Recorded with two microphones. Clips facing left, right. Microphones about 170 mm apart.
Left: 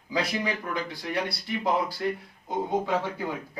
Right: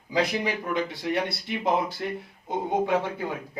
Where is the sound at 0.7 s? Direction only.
20° right (ahead or behind).